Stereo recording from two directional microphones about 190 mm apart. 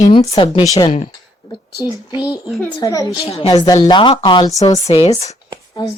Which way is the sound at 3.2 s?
30° left (ahead or behind).